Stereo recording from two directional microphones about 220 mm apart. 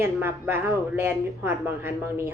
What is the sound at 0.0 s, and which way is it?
Speech, 10° right (ahead or behind).